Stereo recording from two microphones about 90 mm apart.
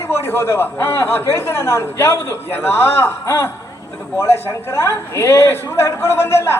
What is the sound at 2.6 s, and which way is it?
Speech, 25° left (ahead or behind).